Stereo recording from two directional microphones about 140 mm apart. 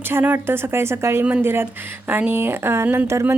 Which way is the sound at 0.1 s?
15° right (ahead or behind).